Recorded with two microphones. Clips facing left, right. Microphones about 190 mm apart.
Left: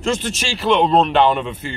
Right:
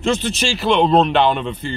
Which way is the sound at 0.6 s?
Centre (ahead or behind).